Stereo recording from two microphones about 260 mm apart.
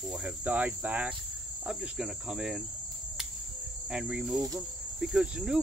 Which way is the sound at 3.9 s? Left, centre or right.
Centre.